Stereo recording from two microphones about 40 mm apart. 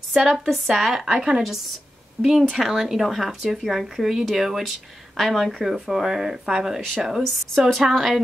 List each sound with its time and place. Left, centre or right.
0.1 s a woman's voice: centre
1.1 s speech: centre
2.2 s speech: right
2.5 s a woman's voice: centre